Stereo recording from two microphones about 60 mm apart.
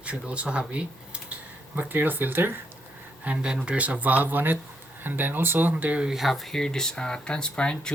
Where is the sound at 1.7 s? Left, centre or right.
Right.